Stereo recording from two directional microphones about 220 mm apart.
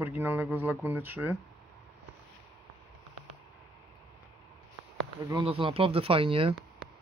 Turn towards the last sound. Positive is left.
turn(degrees=-25)  # may be behind; listen again after turning